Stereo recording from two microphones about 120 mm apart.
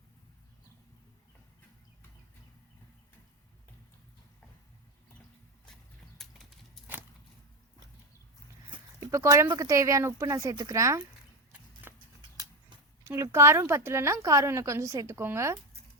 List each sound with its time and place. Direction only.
6.2 s clip-clop: 5° left (ahead or behind)
9.0 s a woman's voice: 25° right (ahead or behind)
11.5 s horse: 15° right (ahead or behind)
13.1 s a woman's voice: 25° right (ahead or behind)